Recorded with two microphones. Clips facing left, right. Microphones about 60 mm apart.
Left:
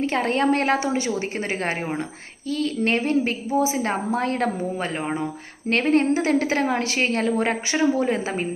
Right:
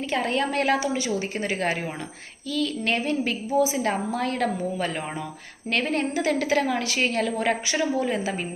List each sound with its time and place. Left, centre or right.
0.0 s a woman's voice: left
5.9 s a woman's voice: left